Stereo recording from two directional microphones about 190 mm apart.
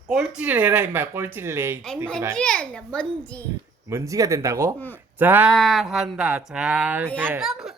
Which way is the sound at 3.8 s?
15° right (ahead or behind).